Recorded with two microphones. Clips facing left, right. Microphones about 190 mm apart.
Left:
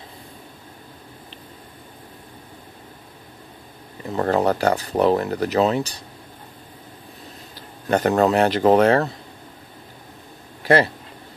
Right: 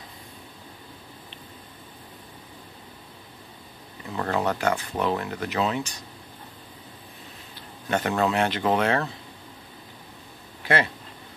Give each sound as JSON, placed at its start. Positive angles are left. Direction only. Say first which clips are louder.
{"t": 4.1, "sound": "speech", "louder": "left 7 dB", "side_deg": 40}
{"t": 7.5, "sound": "speech", "louder": "left 6 dB", "side_deg": 40}
{"t": 10.6, "sound": "a sound", "louder": "left 7 dB", "side_deg": 40}